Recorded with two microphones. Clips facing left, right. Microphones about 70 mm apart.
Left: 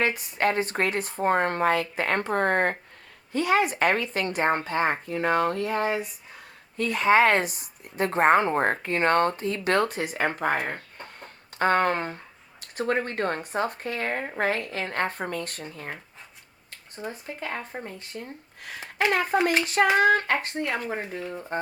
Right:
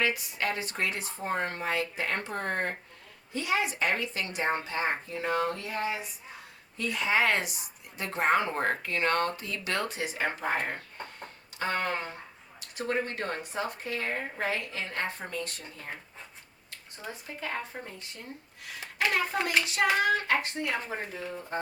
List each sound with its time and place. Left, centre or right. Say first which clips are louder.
0.0 s speech: left 5 dB; left
11.6 s speech: left 8 dB; left
17.0 s speech: left 4 dB; left